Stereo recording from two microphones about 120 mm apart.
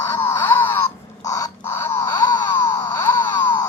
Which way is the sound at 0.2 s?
20° left (ahead or behind).